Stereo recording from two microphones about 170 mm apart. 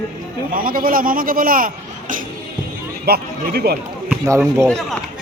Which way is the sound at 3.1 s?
65° right (ahead or behind).